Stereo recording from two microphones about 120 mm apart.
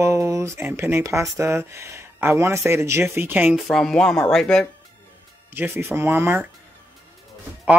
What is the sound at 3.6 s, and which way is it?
Speech, 5° left (ahead or behind).